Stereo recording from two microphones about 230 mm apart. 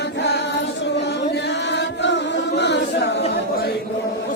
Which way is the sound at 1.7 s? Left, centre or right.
Left.